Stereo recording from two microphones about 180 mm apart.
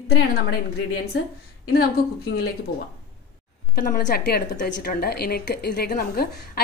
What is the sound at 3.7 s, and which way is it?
A woman's voice, 55° left (ahead or behind).